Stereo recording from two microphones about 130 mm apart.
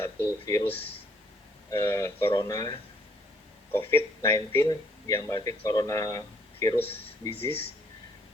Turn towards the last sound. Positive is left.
turn(degrees=20)  # may be behind; listen again after turning